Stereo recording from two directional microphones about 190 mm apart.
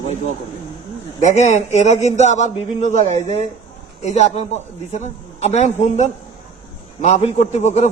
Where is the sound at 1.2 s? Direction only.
40° left (ahead or behind).